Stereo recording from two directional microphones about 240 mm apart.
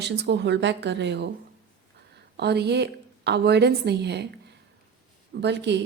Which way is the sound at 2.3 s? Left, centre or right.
Right.